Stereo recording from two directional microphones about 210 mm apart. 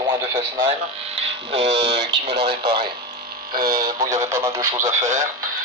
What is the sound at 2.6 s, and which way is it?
Speech, 25° right (ahead or behind).